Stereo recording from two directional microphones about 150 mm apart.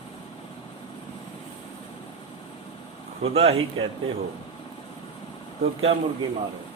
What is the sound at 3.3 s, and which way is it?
Speech, 40° right (ahead or behind).